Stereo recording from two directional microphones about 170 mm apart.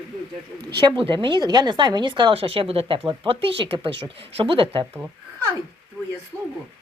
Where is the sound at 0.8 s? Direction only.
30° right (ahead or behind).